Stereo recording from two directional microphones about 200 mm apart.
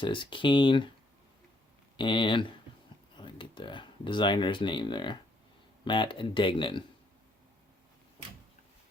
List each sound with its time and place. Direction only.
0.0 s speech: 25° left (ahead or behind)
2.0 s speech: 25° left (ahead or behind)